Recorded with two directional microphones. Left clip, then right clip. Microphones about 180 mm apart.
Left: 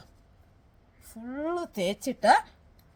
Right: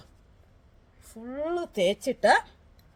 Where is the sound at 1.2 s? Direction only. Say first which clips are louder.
Right 1 dB; 5° left (ahead or behind).